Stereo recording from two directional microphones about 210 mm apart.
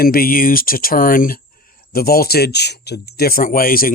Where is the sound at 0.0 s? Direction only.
45° left (ahead or behind).